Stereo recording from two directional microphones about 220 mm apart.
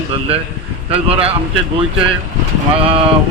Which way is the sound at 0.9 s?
25° right (ahead or behind).